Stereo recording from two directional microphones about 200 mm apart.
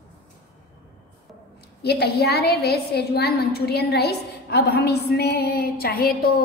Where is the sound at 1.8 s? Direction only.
55° left (ahead or behind).